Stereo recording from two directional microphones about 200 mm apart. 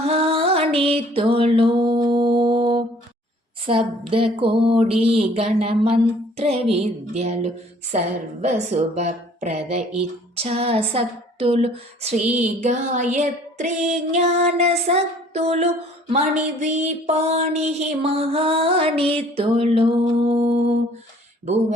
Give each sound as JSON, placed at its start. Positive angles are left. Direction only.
{"t": 0.0, "sound": "music", "side_deg": -30}
{"t": 3.7, "sound": "a sound", "side_deg": -25}
{"t": 5.5, "sound": "a woman's voice", "side_deg": -30}